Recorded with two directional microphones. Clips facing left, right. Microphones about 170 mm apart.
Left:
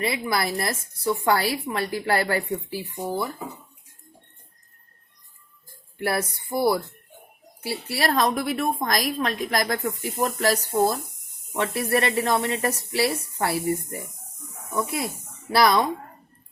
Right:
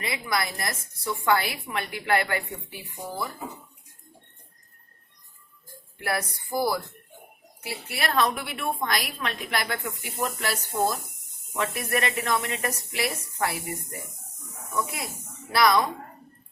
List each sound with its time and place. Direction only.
0.0 s a woman's voice: 30° left (ahead or behind)
6.0 s a sound: 25° left (ahead or behind)
7.6 s a woman's voice: 30° left (ahead or behind)